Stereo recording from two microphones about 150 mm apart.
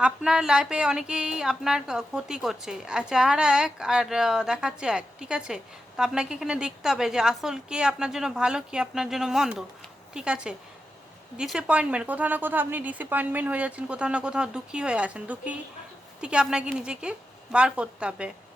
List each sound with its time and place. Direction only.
0.0 s a woman's voice: 5° right (ahead or behind)